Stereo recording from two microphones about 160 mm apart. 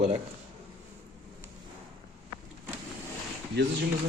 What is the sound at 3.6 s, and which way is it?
Speech, 90° right.